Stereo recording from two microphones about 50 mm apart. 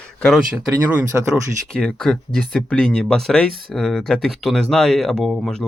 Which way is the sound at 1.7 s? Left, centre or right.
Centre.